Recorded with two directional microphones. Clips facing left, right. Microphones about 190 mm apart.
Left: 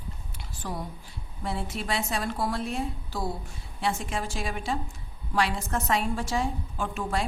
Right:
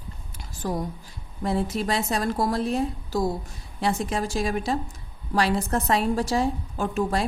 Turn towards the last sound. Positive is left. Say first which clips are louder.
# right 5 dB
turn(degrees=-40)  # may be behind; listen again after turning